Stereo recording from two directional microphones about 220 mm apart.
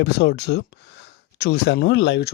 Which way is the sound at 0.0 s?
50° left (ahead or behind).